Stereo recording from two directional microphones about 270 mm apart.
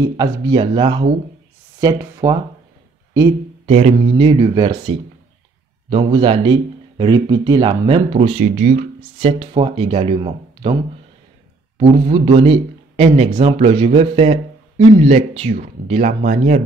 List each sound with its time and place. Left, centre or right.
0.2 s speech: centre
3.6 s speech: right
11.8 s speech: centre